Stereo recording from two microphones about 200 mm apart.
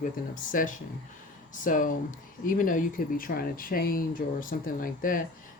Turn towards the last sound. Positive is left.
turn(degrees=45)  # may be behind; listen again after turning